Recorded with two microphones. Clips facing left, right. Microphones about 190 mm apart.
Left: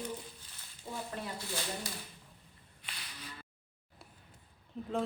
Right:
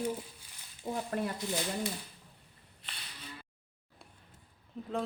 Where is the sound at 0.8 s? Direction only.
50° right (ahead or behind).